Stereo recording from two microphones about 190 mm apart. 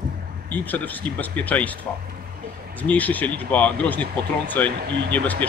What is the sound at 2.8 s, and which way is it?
Speech, 10° left (ahead or behind).